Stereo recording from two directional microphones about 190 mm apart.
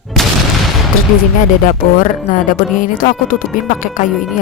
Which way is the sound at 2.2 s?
45° left (ahead or behind).